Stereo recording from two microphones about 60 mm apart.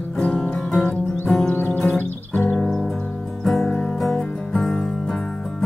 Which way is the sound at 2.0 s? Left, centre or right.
Left.